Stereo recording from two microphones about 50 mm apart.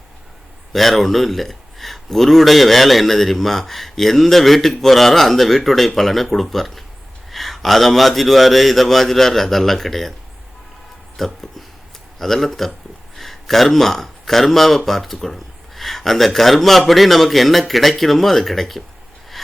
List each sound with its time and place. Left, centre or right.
0.7 s speech: centre
11.2 s speech: centre